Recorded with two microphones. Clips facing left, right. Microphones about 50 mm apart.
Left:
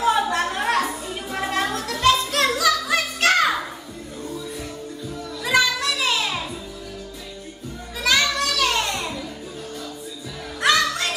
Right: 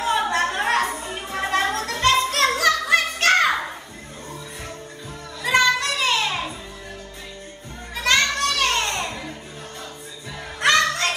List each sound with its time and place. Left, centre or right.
0.0 s music: right
5.4 s music: right
7.9 s music: right
10.6 s music: right